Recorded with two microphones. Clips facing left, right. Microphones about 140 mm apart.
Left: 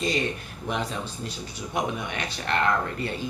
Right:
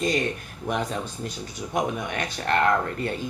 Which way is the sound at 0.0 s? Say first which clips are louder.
Right 2 dB; 50° right (ahead or behind).